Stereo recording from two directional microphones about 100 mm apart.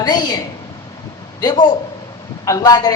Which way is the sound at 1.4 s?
40° left (ahead or behind).